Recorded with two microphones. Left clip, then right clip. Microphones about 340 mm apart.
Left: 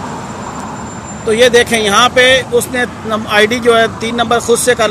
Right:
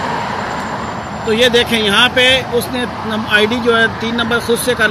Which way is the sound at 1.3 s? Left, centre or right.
Centre.